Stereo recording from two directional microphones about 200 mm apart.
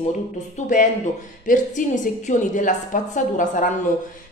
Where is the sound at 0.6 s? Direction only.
35° left (ahead or behind).